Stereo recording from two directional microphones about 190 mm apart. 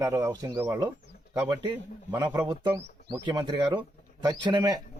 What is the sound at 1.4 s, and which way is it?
Speech, 25° right (ahead or behind).